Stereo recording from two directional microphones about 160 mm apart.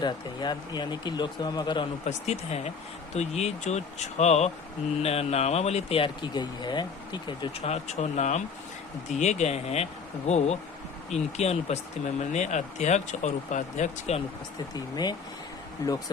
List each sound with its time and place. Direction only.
0.0 s speech: 25° left (ahead or behind)
2.0 s speech: 45° left (ahead or behind)
7.7 s speech: 45° left (ahead or behind)